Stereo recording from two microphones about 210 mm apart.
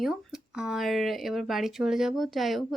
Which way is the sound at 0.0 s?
5° right (ahead or behind).